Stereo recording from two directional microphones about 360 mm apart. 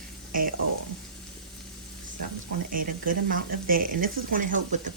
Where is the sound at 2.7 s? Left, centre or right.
Right.